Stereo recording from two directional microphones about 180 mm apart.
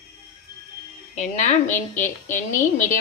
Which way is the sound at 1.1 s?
40° left (ahead or behind).